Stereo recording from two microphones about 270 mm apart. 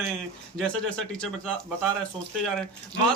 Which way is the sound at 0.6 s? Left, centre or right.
Centre.